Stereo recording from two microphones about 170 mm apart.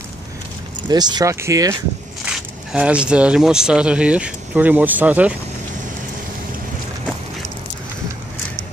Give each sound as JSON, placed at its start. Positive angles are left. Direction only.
{"t": 0.8, "sound": "speech", "side_deg": -25}
{"t": 2.2, "sound": "speech", "side_deg": -5}